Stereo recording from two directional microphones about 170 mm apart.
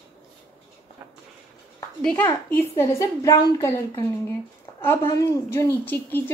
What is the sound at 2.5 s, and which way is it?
Speech, 15° left (ahead or behind).